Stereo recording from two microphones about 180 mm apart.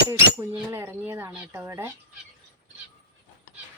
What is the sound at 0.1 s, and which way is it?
Speech, 15° right (ahead or behind).